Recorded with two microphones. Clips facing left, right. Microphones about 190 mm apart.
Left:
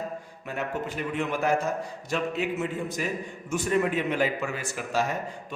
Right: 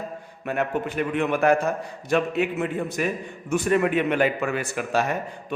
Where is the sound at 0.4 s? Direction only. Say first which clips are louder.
Right 6 dB; 60° right (ahead or behind).